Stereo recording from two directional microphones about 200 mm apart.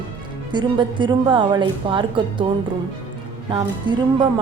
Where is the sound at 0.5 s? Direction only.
25° right (ahead or behind).